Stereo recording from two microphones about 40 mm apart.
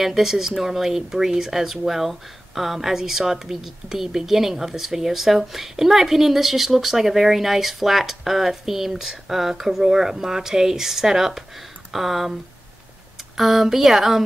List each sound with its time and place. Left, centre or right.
0.0 s speech: centre
13.4 s a woman's voice: centre